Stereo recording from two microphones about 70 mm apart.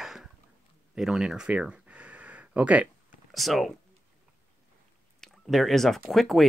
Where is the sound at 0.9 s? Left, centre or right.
Centre.